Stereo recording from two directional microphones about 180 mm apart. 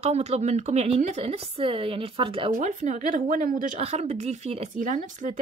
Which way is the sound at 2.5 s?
45° right (ahead or behind).